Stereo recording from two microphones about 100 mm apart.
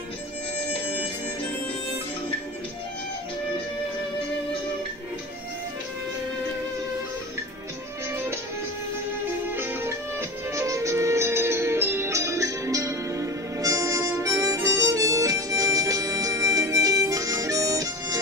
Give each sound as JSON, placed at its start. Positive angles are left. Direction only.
{"t": 8.1, "sound": "music", "side_deg": -25}
{"t": 9.5, "sound": "music", "side_deg": -20}